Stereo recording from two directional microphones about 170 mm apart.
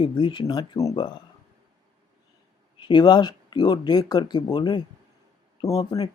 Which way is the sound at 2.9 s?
25° left (ahead or behind).